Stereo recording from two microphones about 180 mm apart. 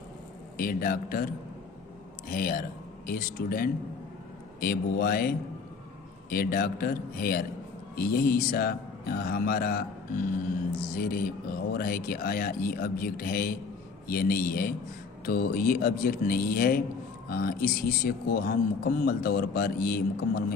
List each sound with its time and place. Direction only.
0.5 s a man's voice: 55° left (ahead or behind)
2.3 s a man's voice: 55° left (ahead or behind)